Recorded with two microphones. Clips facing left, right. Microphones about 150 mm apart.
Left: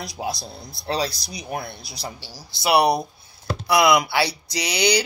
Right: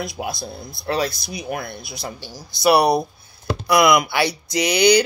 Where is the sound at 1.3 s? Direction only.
55° right (ahead or behind).